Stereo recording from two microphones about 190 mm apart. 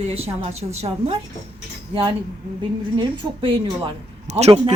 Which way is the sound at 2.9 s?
25° right (ahead or behind).